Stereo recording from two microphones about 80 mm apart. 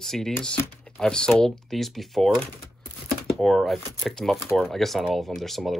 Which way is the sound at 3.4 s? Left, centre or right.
Centre.